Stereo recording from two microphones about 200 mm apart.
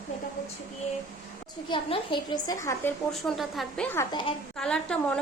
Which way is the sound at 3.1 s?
Centre (ahead or behind).